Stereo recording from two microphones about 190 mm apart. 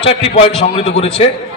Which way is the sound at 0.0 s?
30° left (ahead or behind).